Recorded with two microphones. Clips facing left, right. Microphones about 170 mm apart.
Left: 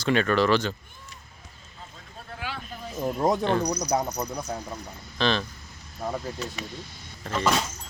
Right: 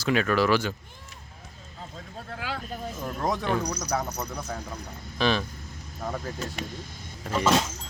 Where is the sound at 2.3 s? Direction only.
90° right.